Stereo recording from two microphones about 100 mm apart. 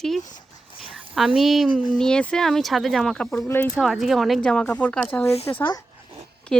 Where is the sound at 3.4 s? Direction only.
20° left (ahead or behind).